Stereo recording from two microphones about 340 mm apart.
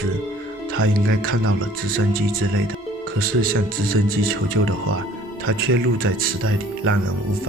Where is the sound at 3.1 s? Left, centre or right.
Right.